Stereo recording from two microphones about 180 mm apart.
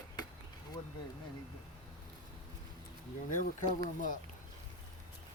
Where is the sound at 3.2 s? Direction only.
45° left (ahead or behind).